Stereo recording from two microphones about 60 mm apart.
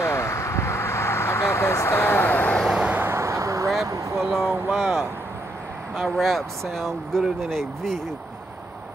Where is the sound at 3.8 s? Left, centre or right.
Right.